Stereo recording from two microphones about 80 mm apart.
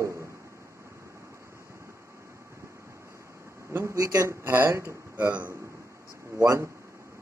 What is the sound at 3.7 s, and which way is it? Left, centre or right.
Speech, right.